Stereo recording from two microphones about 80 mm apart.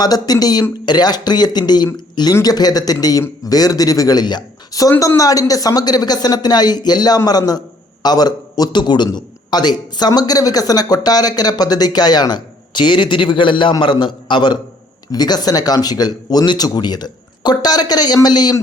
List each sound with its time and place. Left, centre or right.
0.0 s a man's voice: left
4.9 s a man's voice: left
10.2 s speech: left
13.8 s a man's voice: left
15.1 s speech: left